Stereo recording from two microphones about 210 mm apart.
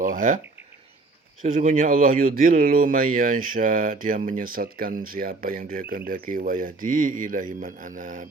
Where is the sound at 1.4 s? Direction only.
35° right (ahead or behind).